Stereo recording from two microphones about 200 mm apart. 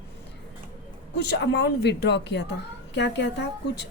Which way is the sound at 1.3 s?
55° left (ahead or behind).